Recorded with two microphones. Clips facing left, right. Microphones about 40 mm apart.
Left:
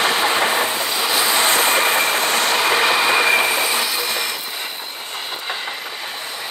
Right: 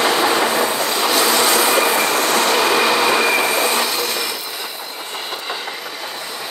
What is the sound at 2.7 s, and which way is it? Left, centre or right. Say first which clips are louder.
Vehicle: right 1 dB; left.